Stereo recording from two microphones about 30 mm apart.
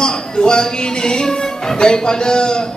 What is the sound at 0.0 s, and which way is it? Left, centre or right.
Speech, left.